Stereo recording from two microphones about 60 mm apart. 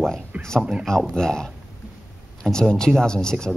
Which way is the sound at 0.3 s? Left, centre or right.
Right.